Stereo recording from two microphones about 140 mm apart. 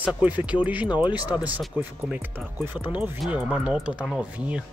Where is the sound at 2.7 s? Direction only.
30° left (ahead or behind).